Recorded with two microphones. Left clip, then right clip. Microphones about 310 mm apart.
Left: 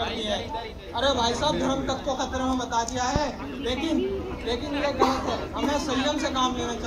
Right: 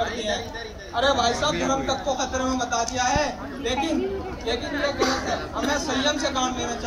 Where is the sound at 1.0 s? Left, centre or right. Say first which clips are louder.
Right 3 dB; right.